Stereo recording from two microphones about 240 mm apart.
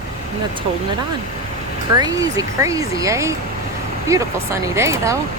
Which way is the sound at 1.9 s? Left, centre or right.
Centre.